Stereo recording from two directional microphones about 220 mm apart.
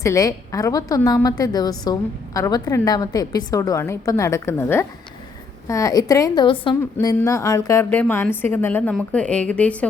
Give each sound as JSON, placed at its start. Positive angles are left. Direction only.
{"t": 0.0, "sound": "a woman's voice", "side_deg": 15}